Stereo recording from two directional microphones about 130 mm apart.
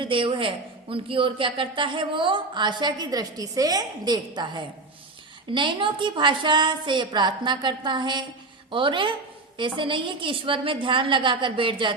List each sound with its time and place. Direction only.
0.0 s a man's voice: 40° right (ahead or behind)